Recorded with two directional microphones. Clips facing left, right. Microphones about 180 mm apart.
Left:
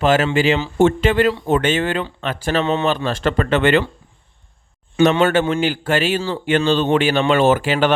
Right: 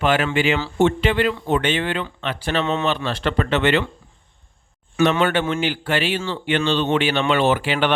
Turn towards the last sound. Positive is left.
turn(degrees=45)  # may be behind; listen again after turning